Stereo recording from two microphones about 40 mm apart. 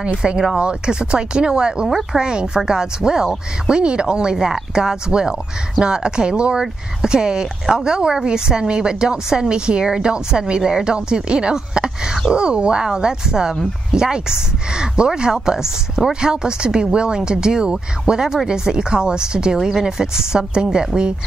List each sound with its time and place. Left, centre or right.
0.1 s speech: centre